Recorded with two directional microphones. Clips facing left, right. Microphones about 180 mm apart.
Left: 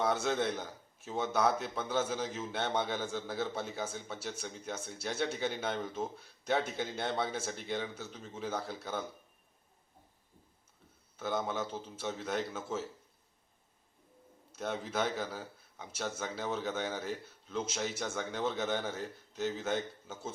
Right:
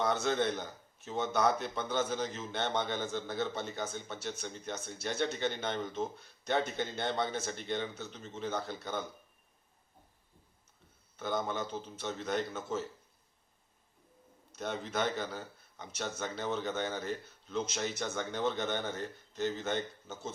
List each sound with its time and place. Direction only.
0.0 s a man's voice: 5° left (ahead or behind)
11.2 s a man's voice: 5° left (ahead or behind)
14.5 s a man's voice: 5° left (ahead or behind)